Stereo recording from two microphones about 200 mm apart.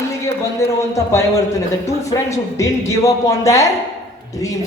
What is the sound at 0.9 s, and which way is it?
Speech, 15° left (ahead or behind).